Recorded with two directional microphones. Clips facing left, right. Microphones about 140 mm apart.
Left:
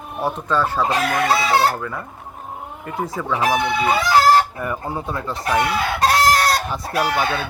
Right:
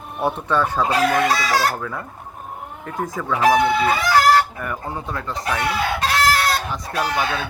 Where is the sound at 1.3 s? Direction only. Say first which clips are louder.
Left 3 dB; 25° left (ahead or behind).